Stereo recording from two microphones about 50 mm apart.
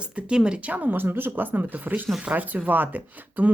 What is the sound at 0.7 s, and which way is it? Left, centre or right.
Speech, right.